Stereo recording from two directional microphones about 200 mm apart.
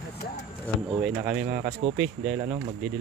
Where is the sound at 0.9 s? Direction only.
5° right (ahead or behind).